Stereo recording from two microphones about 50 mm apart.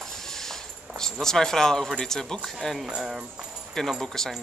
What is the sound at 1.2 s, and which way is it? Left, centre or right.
A man's voice, centre.